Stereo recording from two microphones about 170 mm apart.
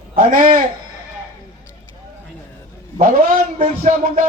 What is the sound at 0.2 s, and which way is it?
Speech, 55° right (ahead or behind).